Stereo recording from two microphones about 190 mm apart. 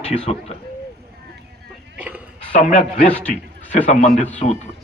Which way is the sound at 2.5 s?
35° left (ahead or behind).